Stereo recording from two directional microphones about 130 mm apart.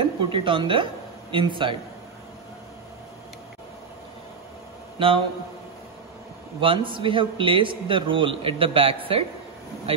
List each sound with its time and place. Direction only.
0.0 s a man's voice: 40° right (ahead or behind)
4.9 s speech: 40° right (ahead or behind)
6.6 s a man's voice: 40° right (ahead or behind)